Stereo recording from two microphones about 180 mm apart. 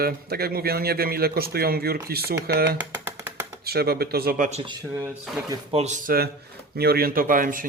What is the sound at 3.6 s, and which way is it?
Speech, 60° right (ahead or behind).